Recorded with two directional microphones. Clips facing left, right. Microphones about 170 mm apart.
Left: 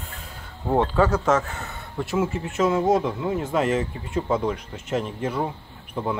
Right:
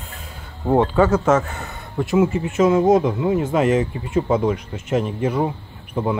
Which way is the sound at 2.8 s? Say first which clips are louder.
Right 5 dB; 20° right (ahead or behind).